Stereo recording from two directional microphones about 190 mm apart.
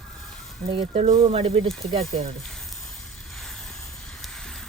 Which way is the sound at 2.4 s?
Centre (ahead or behind).